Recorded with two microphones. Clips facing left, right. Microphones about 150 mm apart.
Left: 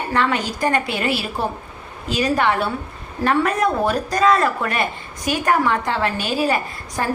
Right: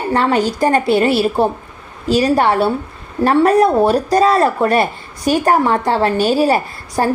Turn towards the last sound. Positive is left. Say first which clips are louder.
# right 6 dB
turn(degrees=-35)  # may be behind; listen again after turning